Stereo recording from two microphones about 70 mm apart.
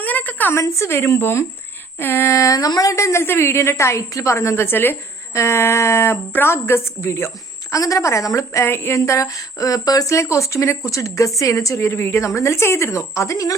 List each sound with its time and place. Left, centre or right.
0.0 s a woman's voice: left
0.5 s a woman's voice: left
2.9 s a woman's voice: left
5.3 s a woman's voice: left
7.7 s speech: left
8.6 s a woman's voice: left
9.0 s speech: left